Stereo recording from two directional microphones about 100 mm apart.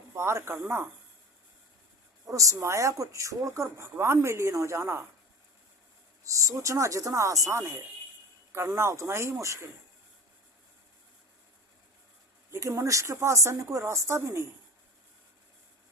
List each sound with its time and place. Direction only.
0.1 s speech: 25° right (ahead or behind)
2.2 s speech: 35° right (ahead or behind)
6.2 s speech: 30° right (ahead or behind)
12.5 s speech: 30° right (ahead or behind)